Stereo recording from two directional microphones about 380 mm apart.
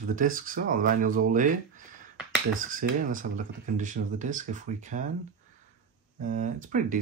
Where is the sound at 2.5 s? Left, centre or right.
Right.